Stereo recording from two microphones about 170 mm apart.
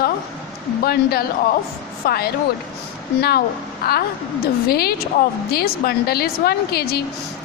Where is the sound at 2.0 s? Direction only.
65° left (ahead or behind).